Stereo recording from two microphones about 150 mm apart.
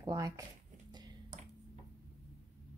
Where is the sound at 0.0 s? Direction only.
25° right (ahead or behind).